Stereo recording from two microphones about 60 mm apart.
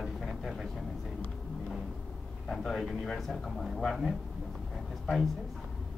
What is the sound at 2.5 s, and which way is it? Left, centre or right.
A man's voice, centre.